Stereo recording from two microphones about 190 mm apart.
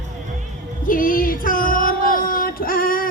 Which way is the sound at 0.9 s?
45° left (ahead or behind).